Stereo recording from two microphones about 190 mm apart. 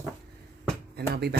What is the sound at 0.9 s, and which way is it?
Speech, 55° right (ahead or behind).